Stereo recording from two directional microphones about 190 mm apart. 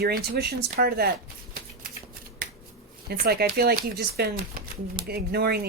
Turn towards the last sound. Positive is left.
turn(degrees=-55)  # may be behind; listen again after turning